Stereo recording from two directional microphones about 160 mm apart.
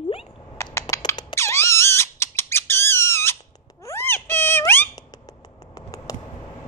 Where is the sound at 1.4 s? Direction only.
15° left (ahead or behind).